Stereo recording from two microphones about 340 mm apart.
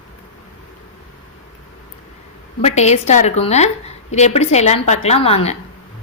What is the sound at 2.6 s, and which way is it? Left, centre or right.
A woman's voice, centre.